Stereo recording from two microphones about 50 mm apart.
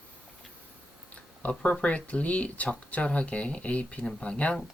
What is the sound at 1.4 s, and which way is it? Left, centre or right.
Speech, left.